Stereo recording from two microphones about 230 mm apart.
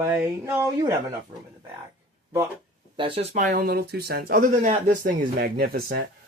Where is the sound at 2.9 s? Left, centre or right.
Right.